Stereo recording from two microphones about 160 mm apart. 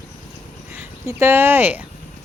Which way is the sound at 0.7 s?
15° right (ahead or behind).